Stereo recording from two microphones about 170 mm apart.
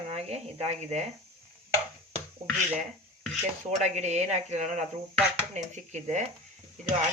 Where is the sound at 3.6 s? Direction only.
40° right (ahead or behind).